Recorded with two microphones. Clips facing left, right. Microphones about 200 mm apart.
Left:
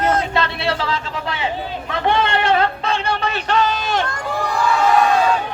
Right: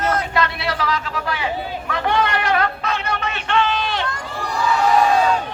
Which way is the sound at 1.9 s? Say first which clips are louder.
Left 2 dB; 25° left (ahead or behind).